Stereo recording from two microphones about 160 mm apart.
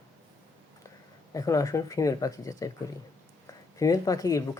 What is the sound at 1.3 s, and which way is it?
Speech, 20° left (ahead or behind).